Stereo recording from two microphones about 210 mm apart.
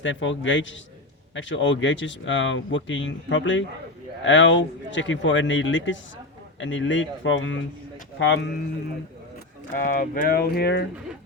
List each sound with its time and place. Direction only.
0.0 s speech: 65° left (ahead or behind)
9.7 s speech: 40° left (ahead or behind)